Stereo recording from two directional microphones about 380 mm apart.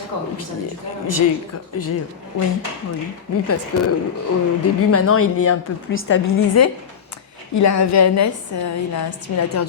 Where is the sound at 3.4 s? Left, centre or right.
Left.